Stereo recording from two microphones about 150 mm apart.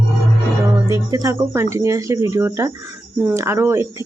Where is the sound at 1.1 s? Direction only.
20° right (ahead or behind).